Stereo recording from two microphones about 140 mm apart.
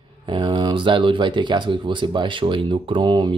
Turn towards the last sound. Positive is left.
turn(degrees=-35)  # may be behind; listen again after turning